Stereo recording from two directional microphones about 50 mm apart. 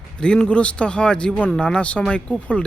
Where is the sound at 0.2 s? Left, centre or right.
Centre.